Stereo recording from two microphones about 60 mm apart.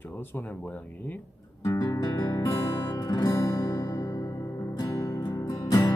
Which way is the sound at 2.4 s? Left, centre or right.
Left.